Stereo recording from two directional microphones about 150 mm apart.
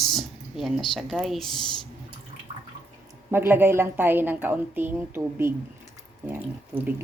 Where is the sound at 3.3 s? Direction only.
15° right (ahead or behind).